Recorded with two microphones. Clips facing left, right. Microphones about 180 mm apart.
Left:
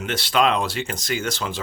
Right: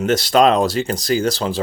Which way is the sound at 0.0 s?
40° right (ahead or behind).